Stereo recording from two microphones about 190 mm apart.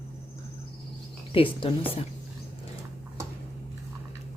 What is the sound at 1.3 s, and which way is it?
Speech, 30° left (ahead or behind).